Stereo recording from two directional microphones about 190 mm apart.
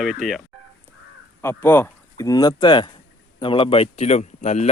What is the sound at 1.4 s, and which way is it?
Speech, 10° left (ahead or behind).